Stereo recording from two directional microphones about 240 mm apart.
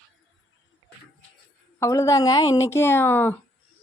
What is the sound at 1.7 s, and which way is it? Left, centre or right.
A woman's voice, centre.